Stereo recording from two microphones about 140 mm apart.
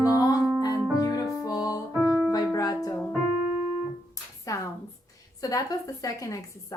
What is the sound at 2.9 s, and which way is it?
Piano, 10° left (ahead or behind).